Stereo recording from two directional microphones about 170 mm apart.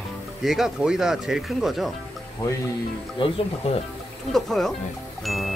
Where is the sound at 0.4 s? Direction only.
Centre (ahead or behind).